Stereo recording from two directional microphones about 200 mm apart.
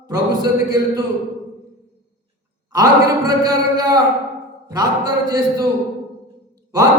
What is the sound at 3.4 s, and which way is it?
Speech, 20° right (ahead or behind).